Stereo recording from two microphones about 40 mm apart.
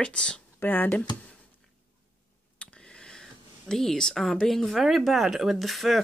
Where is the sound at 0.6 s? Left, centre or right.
Left.